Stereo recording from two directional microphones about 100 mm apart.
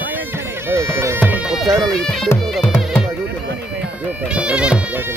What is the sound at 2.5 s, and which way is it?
Music, centre (ahead or behind).